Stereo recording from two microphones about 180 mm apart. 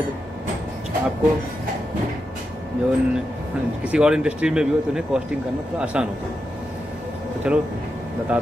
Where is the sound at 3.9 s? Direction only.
5° right (ahead or behind).